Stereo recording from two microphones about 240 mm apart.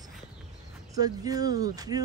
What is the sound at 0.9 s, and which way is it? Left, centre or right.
A woman's voice, centre.